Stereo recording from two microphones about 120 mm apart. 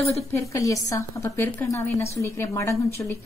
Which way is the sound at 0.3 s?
25° left (ahead or behind).